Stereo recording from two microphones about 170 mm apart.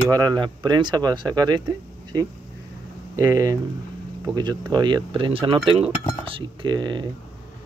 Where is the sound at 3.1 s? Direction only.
20° right (ahead or behind).